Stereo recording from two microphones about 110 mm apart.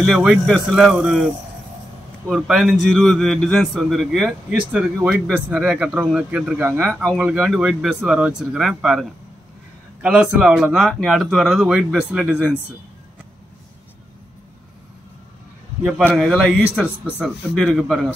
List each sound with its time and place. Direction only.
0.0 s a man's voice: 5° right (ahead or behind)
10.2 s a man's voice: 15° right (ahead or behind)
16.2 s a man's voice: 5° left (ahead or behind)
16.8 s speech: 10° right (ahead or behind)
17.7 s a man's voice: centre (ahead or behind)